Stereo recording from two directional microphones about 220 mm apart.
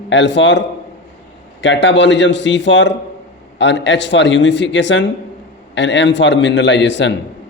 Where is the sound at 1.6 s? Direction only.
55° left (ahead or behind).